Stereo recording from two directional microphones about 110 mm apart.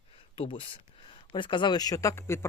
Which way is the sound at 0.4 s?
55° left (ahead or behind).